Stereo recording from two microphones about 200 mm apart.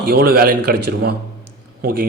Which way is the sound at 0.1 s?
50° right (ahead or behind).